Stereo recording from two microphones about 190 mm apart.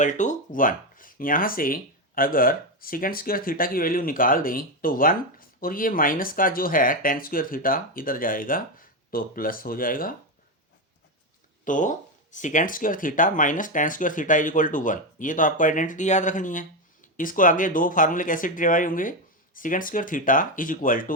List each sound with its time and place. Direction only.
0.0 s speech: 40° left (ahead or behind)
11.6 s speech: 40° left (ahead or behind)